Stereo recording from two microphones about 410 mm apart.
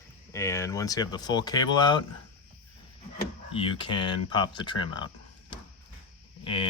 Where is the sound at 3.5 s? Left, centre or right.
Centre.